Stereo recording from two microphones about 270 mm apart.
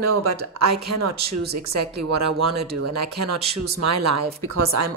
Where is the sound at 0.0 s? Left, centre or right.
Right.